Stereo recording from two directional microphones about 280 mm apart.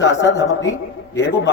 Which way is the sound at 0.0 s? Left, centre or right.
Left.